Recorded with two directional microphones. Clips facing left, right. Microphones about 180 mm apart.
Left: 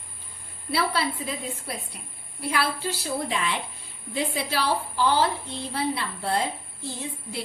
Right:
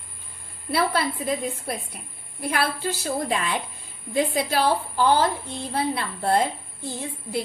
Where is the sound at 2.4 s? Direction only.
50° right (ahead or behind).